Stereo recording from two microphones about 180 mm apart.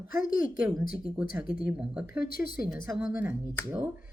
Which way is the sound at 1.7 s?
5° right (ahead or behind).